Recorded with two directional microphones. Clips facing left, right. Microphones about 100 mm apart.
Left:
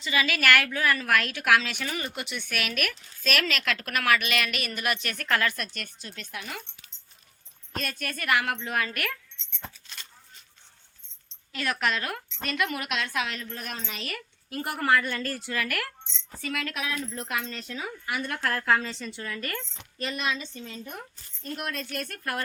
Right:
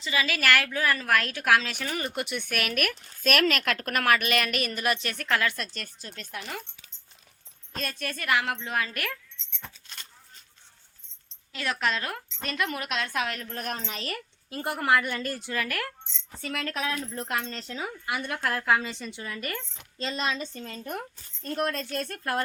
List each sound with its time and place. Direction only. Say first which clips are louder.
0.0 s a woman's voice: left 1 dB; 30° right (ahead or behind)
5.7 s a woman's voice: even; 30° right (ahead or behind)
7.8 s a woman's voice: even; 25° right (ahead or behind)
11.5 s a woman's voice: left 1 dB; 20° right (ahead or behind)
13.1 s a woman's voice: right 1 dB; 50° right (ahead or behind)
14.5 s a woman's voice: even; 25° right (ahead or behind)
20.0 s a woman's voice: right 1 dB; 25° right (ahead or behind); by 21.0 s 45° right (ahead or behind)
21.4 s a woman's voice: right 5 dB; 35° right (ahead or behind)